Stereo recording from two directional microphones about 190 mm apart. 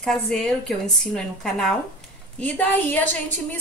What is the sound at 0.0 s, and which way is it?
A woman's voice, 5° left (ahead or behind).